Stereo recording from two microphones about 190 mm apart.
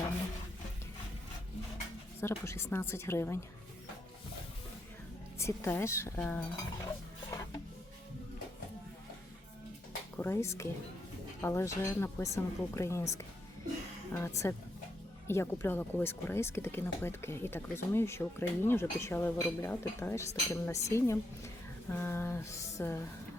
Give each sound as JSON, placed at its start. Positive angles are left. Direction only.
{"t": 2.2, "sound": "speech", "side_deg": 15}
{"t": 5.4, "sound": "speech", "side_deg": 15}
{"t": 6.5, "sound": "dishes", "side_deg": 20}
{"t": 10.2, "sound": "speech", "side_deg": 10}